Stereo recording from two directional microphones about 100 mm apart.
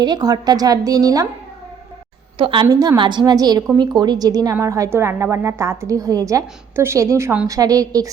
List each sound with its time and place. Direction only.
0.0 s a woman's voice: 40° right (ahead or behind)
2.4 s a woman's voice: 55° right (ahead or behind)
2.6 s a woman's voice: 40° right (ahead or behind)
3.0 s a woman's voice: 50° right (ahead or behind)